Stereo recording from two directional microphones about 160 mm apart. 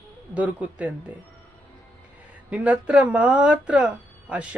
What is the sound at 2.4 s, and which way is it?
Speech, 10° right (ahead or behind).